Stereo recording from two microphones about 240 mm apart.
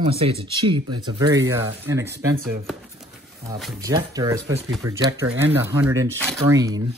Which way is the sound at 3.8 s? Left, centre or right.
Centre.